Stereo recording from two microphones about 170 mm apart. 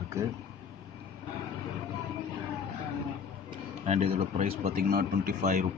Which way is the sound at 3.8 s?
35° right (ahead or behind).